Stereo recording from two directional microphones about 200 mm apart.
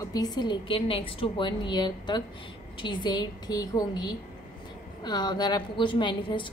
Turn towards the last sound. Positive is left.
turn(degrees=25)  # may be behind; listen again after turning